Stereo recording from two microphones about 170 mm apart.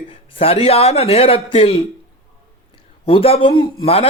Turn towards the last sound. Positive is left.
turn(degrees=35)  # may be behind; listen again after turning